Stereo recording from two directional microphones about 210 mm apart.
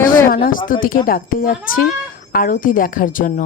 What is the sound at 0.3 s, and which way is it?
A woman's voice, 40° left (ahead or behind).